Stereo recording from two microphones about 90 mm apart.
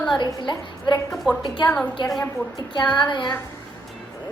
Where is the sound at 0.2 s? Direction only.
55° left (ahead or behind).